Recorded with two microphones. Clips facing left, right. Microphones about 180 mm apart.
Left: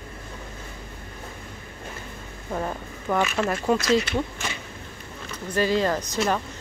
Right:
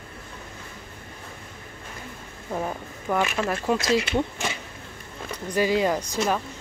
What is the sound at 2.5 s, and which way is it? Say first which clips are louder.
Speech: even; 5° right (ahead or behind).